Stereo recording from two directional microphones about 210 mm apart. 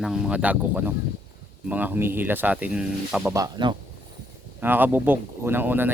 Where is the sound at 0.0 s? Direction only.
5° right (ahead or behind).